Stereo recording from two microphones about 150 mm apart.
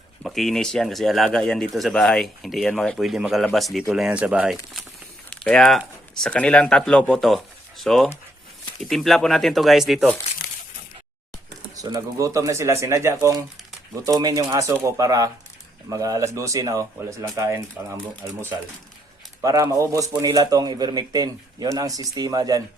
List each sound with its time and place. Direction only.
0.2 s speech: centre (ahead or behind)
5.3 s speech: 5° left (ahead or behind)
11.8 s speech: 25° right (ahead or behind)
19.4 s speech: 20° right (ahead or behind)